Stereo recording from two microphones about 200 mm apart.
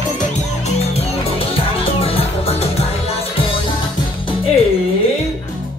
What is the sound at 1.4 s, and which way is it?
Music, 30° left (ahead or behind).